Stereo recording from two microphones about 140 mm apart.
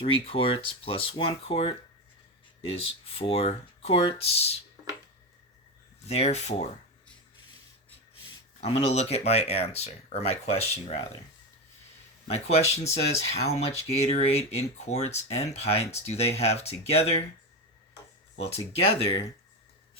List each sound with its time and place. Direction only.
0.0 s speech: 40° left (ahead or behind)
6.1 s speech: 50° left (ahead or behind)
8.6 s speech: 50° left (ahead or behind)
12.3 s speech: 50° left (ahead or behind)
18.3 s speech: 45° left (ahead or behind)